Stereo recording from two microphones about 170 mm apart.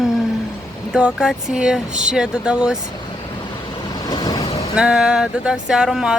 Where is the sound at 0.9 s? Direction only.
5° right (ahead or behind).